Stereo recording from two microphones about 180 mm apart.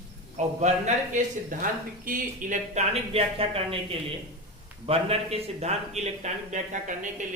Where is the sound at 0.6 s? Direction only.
40° right (ahead or behind).